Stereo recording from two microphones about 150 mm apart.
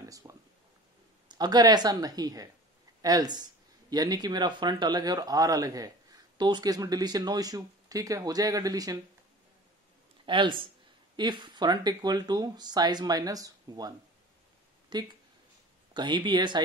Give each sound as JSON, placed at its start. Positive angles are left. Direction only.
{"t": 0.2, "sound": "a sound", "side_deg": -20}
{"t": 1.3, "sound": "speech", "side_deg": -25}
{"t": 10.2, "sound": "speech", "side_deg": -35}